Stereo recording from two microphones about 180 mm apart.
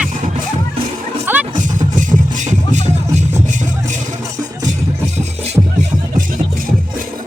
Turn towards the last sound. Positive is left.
turn(degrees=-10)  # may be behind; listen again after turning